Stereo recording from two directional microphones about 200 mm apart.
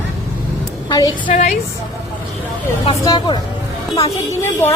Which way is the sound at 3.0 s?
20° left (ahead or behind).